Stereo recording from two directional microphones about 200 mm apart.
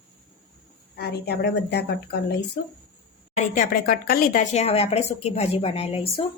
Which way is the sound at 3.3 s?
40° left (ahead or behind).